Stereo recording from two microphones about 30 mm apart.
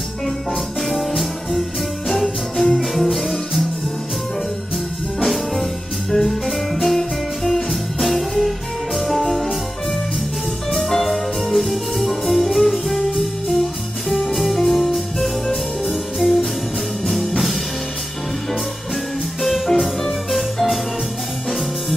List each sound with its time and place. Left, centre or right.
0.8 s music: centre
2.7 s music: centre
5.2 s music: centre
10.7 s music: centre
19.4 s music: centre